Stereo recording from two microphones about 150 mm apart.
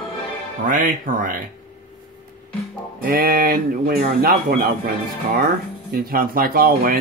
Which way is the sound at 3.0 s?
85° right.